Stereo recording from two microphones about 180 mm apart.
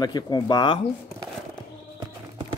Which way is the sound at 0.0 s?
25° left (ahead or behind).